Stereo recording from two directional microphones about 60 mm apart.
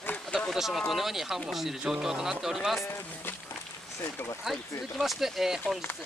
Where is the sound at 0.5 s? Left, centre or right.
Centre.